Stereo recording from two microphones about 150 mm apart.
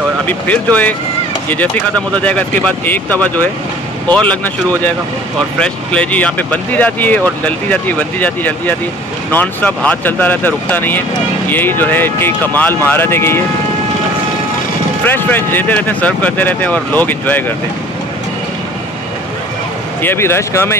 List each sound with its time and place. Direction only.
0.3 s speech: 10° left (ahead or behind)
5.6 s speech: 10° left (ahead or behind)
15.0 s speech: 15° left (ahead or behind)
20.0 s speech: 15° left (ahead or behind)